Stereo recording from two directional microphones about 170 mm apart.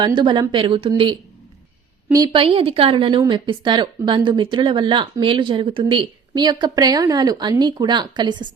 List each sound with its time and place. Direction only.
0.2 s a woman's voice: 25° right (ahead or behind)